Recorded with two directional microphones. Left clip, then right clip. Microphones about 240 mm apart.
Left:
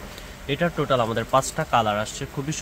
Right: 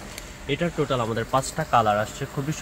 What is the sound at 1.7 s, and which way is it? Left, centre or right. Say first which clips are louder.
Speech: right 2 dB; centre.